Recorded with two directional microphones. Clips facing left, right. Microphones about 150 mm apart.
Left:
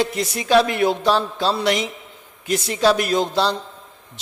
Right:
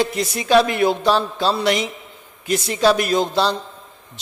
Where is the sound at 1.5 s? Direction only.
10° right (ahead or behind).